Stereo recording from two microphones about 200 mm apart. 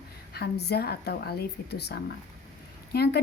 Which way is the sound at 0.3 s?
55° left (ahead or behind).